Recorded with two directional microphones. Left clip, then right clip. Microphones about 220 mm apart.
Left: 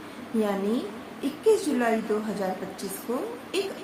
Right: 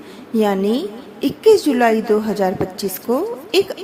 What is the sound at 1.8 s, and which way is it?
A woman's voice, 45° right (ahead or behind).